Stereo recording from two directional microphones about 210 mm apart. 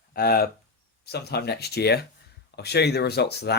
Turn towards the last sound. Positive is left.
turn(degrees=50)  # may be behind; listen again after turning